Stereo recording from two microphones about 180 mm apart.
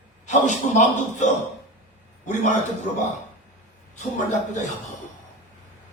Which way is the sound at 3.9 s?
40° left (ahead or behind).